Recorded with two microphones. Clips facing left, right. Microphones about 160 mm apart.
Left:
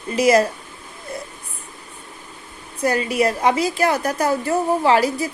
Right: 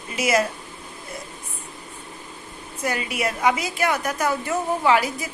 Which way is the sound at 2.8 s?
35° left (ahead or behind).